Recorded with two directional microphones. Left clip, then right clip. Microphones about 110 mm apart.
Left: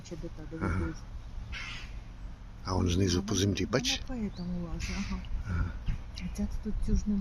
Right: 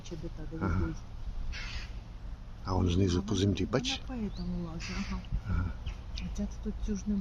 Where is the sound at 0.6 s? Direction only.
10° right (ahead or behind).